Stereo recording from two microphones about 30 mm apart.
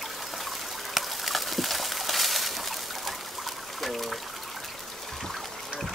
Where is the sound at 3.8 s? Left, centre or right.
Centre.